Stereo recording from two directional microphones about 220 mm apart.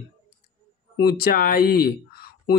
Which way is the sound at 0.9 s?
45° left (ahead or behind).